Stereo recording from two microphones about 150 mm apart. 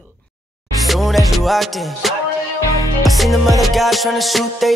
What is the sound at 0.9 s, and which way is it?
Music, centre (ahead or behind).